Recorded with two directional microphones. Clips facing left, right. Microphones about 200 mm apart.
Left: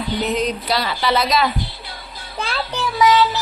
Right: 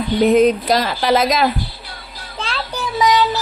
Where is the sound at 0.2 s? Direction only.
50° right (ahead or behind).